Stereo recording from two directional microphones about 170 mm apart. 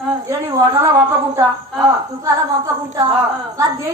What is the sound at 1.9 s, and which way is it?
A woman's voice, 20° right (ahead or behind).